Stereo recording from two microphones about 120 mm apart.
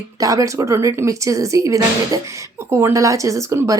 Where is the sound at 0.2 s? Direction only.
30° right (ahead or behind).